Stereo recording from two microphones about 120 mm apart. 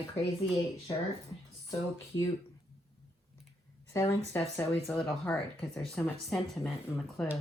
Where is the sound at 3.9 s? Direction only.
25° left (ahead or behind).